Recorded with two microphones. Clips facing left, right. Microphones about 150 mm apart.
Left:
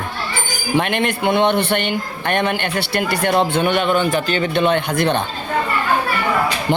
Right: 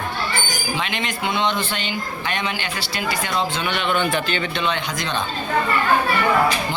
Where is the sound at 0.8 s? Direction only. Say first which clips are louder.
Left 11 dB; 55° left (ahead or behind).